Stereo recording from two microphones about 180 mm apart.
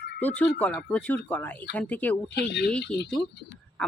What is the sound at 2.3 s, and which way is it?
Speech, 70° left (ahead or behind).